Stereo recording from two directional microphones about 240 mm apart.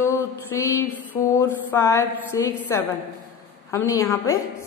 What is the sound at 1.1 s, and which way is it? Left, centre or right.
A woman's voice, centre.